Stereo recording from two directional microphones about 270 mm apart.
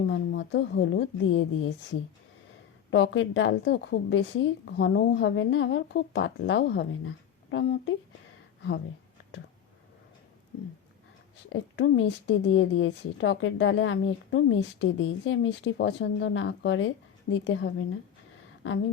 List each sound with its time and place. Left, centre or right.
0.0 s a woman's voice: left
11.4 s a woman's voice: left